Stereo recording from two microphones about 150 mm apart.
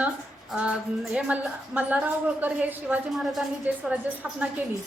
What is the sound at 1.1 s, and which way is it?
A woman's voice, 10° right (ahead or behind).